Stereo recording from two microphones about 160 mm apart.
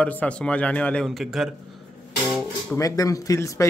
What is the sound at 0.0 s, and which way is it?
Speech, 10° left (ahead or behind).